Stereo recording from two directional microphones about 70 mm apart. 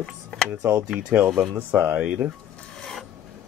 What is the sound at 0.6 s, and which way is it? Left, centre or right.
Speech, right.